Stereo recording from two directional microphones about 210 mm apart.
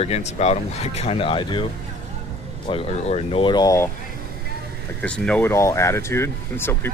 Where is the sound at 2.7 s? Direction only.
30° left (ahead or behind).